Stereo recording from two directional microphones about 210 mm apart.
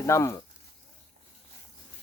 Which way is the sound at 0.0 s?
15° left (ahead or behind).